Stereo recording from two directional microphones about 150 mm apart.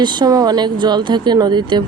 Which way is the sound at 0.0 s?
30° right (ahead or behind).